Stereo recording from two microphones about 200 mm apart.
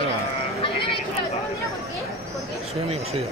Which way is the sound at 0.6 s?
25° left (ahead or behind).